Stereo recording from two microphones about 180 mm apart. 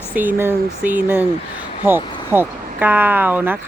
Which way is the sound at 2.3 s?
10° right (ahead or behind).